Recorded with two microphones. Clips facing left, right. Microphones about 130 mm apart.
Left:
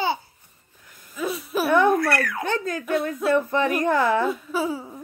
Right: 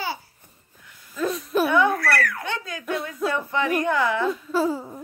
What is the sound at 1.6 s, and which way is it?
Speech, 50° left (ahead or behind).